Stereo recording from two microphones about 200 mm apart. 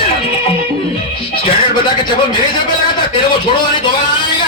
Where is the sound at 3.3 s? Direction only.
25° left (ahead or behind).